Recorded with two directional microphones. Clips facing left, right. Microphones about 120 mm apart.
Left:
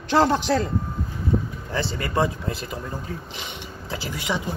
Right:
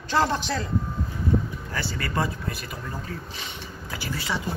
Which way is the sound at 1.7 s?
25° left (ahead or behind).